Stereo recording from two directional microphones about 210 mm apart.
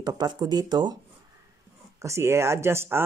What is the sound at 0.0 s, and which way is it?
Speech, 20° right (ahead or behind).